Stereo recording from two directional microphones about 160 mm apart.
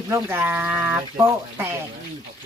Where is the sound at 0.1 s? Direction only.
15° right (ahead or behind).